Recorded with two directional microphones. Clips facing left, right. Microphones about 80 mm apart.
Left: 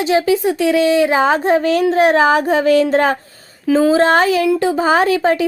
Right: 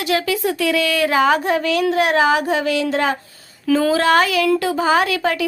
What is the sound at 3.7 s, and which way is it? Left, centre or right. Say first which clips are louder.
Speech: left 4 dB; left.